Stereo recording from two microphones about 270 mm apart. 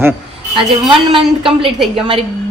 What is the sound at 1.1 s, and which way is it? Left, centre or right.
Speech, centre.